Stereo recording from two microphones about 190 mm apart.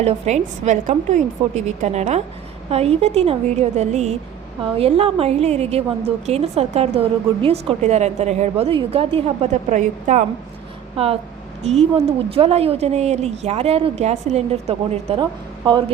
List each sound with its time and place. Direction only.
0.0 s a woman's voice: 35° right (ahead or behind)